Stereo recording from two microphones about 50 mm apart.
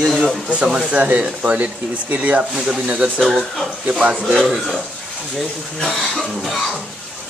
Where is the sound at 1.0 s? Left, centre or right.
Right.